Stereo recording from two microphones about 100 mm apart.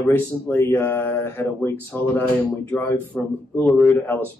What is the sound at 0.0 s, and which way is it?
Speech, 20° left (ahead or behind).